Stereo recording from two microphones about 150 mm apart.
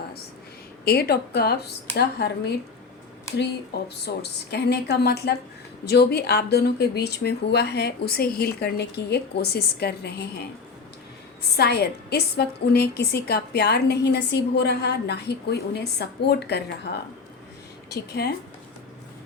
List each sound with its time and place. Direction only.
0.9 s a woman's voice: 90° left
11.5 s a woman's voice: 90° left
18.2 s a woman's voice: 90° left